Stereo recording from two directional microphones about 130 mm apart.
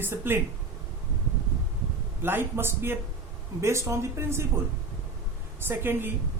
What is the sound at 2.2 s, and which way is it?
A man's voice, 15° right (ahead or behind).